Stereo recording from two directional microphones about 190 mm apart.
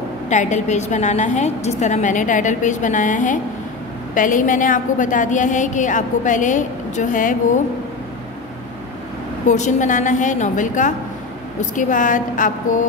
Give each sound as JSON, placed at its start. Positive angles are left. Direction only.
{"t": 0.3, "sound": "a woman's voice", "side_deg": 40}
{"t": 9.5, "sound": "a woman's voice", "side_deg": 40}